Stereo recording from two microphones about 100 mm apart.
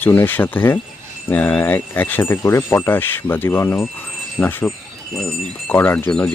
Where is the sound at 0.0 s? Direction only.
20° left (ahead or behind).